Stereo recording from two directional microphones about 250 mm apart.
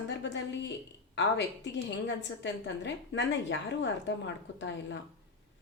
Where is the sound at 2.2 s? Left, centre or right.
Left.